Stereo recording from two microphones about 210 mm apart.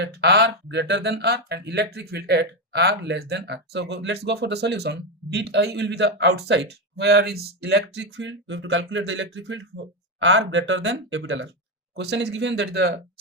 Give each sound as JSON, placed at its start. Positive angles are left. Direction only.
{"t": 0.0, "sound": "speech", "side_deg": -50}